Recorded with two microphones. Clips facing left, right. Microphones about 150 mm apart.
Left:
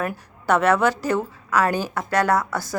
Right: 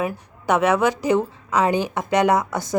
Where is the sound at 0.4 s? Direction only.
15° right (ahead or behind).